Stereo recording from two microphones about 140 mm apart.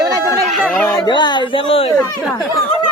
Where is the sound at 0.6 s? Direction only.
10° left (ahead or behind).